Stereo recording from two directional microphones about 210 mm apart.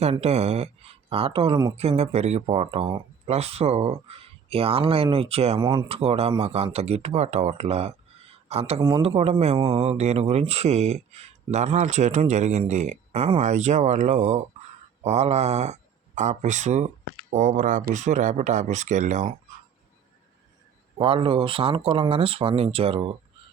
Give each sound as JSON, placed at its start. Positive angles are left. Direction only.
{"t": 0.0, "sound": "speech", "side_deg": -30}
{"t": 21.0, "sound": "speech", "side_deg": -25}